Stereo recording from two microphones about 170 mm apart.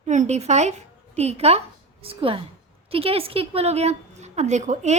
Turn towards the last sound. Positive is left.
turn(degrees=-45)  # may be behind; listen again after turning